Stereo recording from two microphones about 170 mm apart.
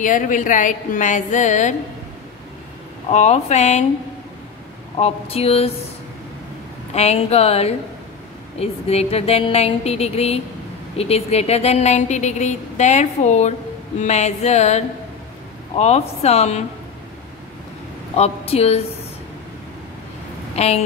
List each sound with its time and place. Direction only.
0.0 s a woman's voice: 50° left (ahead or behind)
3.1 s a woman's voice: 40° left (ahead or behind)
4.9 s a woman's voice: 35° left (ahead or behind)
6.9 s a woman's voice: 40° left (ahead or behind)
18.1 s a woman's voice: 35° left (ahead or behind)
20.5 s speech: 40° left (ahead or behind)